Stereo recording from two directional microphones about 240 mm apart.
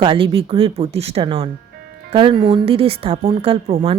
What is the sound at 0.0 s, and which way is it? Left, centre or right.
Speech, right.